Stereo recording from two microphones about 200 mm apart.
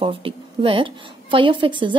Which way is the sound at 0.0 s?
25° right (ahead or behind).